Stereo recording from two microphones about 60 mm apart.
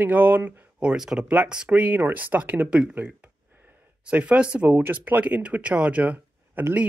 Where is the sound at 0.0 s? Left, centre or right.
Right.